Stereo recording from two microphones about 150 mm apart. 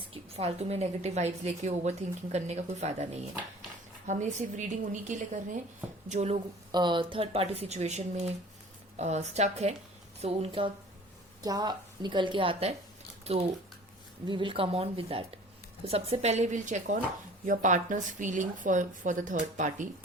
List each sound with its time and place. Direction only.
0.1 s a woman's voice: 45° right (ahead or behind)
6.7 s a woman's voice: 30° right (ahead or behind)
11.4 s a woman's voice: 25° right (ahead or behind); by 19.9 s 55° right (ahead or behind)